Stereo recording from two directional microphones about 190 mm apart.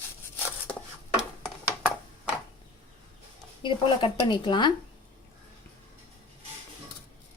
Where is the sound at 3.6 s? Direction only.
25° left (ahead or behind).